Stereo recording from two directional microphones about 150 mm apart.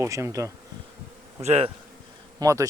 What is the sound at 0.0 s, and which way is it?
Speech, 20° right (ahead or behind).